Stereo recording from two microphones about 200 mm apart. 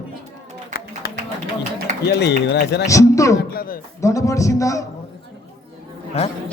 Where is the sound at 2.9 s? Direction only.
15° left (ahead or behind).